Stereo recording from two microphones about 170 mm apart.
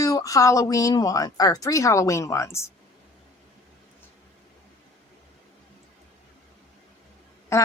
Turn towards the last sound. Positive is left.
turn(degrees=15)  # may be behind; listen again after turning